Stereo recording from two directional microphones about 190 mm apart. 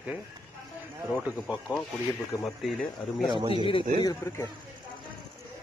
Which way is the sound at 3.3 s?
25° right (ahead or behind).